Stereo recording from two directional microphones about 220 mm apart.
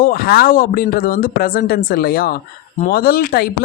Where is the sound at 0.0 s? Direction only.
40° left (ahead or behind).